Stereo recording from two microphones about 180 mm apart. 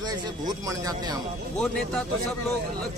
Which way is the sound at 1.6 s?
5° left (ahead or behind).